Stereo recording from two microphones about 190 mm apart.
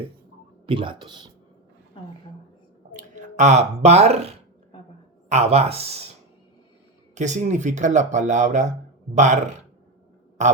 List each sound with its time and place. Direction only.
0.7 s speech: 25° right (ahead or behind)
2.9 s speech: 40° right (ahead or behind)
7.2 s speech: 40° right (ahead or behind)